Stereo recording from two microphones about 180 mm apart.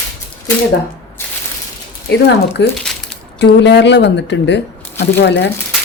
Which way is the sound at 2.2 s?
70° left (ahead or behind).